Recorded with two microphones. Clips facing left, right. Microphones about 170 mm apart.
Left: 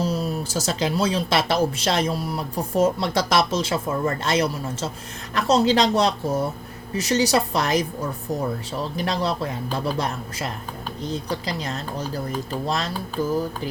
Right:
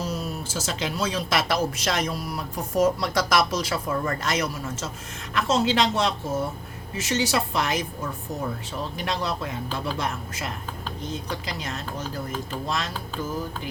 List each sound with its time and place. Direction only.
0.0 s a woman's voice: 30° left (ahead or behind)